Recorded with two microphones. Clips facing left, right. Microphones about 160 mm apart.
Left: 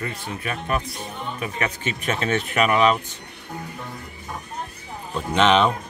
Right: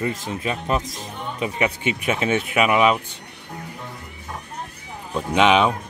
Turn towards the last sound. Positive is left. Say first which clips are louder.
# right 1 dB
turn(degrees=-10)  # may be behind; listen again after turning